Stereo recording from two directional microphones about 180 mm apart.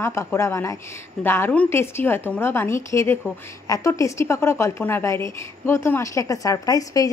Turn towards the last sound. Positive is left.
turn(degrees=20)  # may be behind; listen again after turning